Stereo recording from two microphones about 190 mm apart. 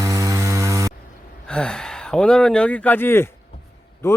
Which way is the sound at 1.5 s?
5° left (ahead or behind).